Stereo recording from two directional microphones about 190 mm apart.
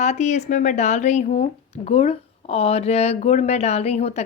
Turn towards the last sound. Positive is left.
turn(degrees=35)  # may be behind; listen again after turning